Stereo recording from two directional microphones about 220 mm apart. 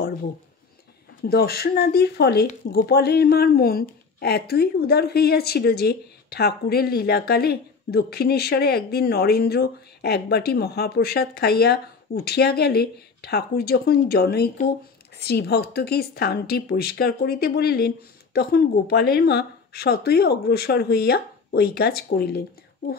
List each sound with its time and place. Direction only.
1.3 s a woman's voice: 45° left (ahead or behind)